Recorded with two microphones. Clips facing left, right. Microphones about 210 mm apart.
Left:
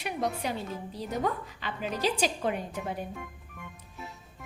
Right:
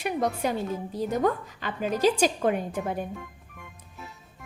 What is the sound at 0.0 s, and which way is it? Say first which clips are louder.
A woman's voice: right 5 dB; 50° right (ahead or behind).